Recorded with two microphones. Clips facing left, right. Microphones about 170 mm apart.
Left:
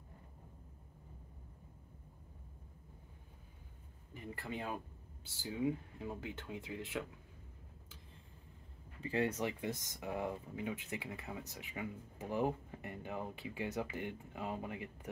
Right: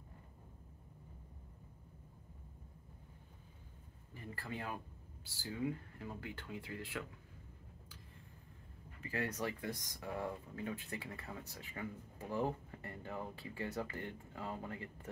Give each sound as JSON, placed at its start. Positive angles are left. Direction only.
{"t": 4.1, "sound": "speech", "side_deg": 20}
{"t": 9.0, "sound": "speech", "side_deg": 25}